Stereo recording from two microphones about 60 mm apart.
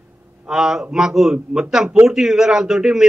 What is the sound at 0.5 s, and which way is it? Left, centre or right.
A man's voice, centre.